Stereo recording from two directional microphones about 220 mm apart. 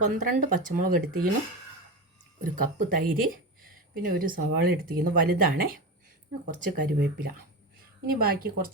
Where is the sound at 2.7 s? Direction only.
40° right (ahead or behind).